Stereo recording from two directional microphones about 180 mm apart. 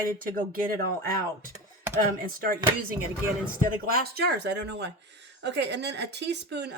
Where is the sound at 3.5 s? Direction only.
55° right (ahead or behind).